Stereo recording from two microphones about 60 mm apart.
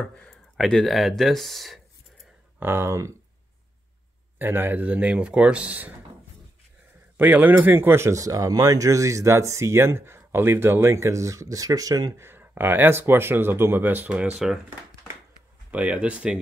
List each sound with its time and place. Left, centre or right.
0.2 s speech: centre
2.6 s speech: right
4.4 s speech: right
7.2 s speech: right
8.1 s speech: right
12.2 s speech: right
14.0 s speech: right
15.7 s speech: right